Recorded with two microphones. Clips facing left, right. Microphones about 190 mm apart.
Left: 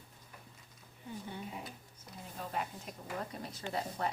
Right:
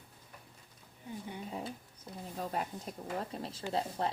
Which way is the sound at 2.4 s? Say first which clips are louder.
Right 2 dB; 40° right (ahead or behind).